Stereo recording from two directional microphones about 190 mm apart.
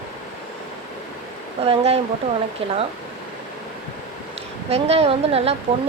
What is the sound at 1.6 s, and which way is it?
Speech, 30° right (ahead or behind).